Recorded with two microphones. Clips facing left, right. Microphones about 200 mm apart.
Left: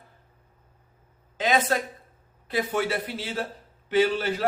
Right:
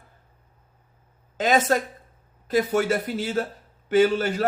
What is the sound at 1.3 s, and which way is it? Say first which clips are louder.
A woman's voice: right 3 dB; 45° right (ahead or behind).